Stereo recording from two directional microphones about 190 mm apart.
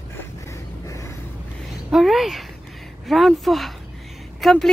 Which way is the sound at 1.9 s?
Centre (ahead or behind).